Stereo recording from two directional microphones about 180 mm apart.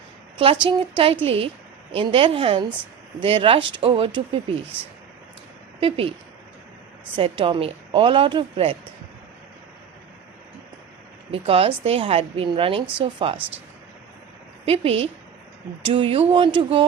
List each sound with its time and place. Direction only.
0.3 s a woman's voice: 30° right (ahead or behind)
5.8 s a woman's voice: 30° right (ahead or behind)
7.2 s a woman's voice: 30° right (ahead or behind)
11.4 s a woman's voice: 30° right (ahead or behind)
14.6 s a woman's voice: 30° right (ahead or behind)